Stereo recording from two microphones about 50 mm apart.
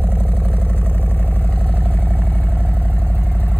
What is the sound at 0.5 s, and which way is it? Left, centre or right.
Vehicle, left.